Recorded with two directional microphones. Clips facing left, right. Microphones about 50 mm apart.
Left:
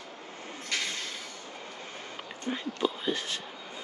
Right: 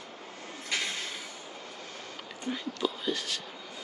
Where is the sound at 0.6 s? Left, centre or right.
Centre.